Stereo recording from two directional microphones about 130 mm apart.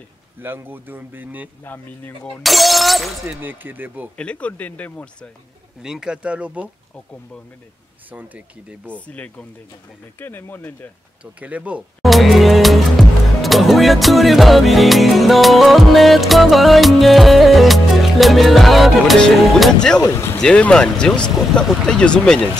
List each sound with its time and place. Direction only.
0.4 s speech: 15° right (ahead or behind)
1.6 s speech: 15° left (ahead or behind)
2.4 s speech: centre (ahead or behind)
3.3 s speech: 15° right (ahead or behind)
4.2 s speech: 10° left (ahead or behind)
5.8 s speech: 5° right (ahead or behind)
8.1 s speech: 10° right (ahead or behind)
8.8 s speech: 10° left (ahead or behind)
11.3 s music: 10° right (ahead or behind); by 20.0 s 5° left (ahead or behind)
20.0 s speech: 20° left (ahead or behind)
20.3 s speech: 5° left (ahead or behind)